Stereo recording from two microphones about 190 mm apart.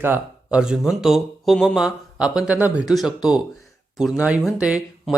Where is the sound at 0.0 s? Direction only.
10° right (ahead or behind).